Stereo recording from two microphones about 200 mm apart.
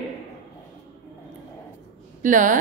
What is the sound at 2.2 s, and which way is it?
Speech, 40° right (ahead or behind).